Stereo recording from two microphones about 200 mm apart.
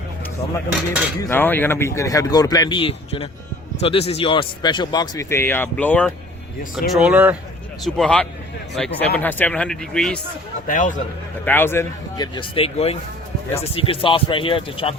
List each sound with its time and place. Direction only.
1.2 s a man's voice: 10° left (ahead or behind)
10.7 s a man's voice: 40° left (ahead or behind)
11.4 s a man's voice: 10° left (ahead or behind); by 14.9 s 25° left (ahead or behind)